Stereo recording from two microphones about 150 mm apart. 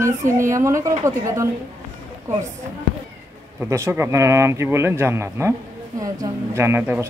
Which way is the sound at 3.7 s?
20° right (ahead or behind).